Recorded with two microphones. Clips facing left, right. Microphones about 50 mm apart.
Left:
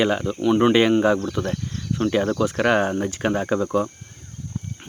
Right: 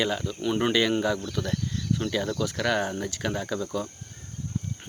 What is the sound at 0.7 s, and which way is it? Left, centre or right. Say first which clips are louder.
Speech: left 6 dB; left.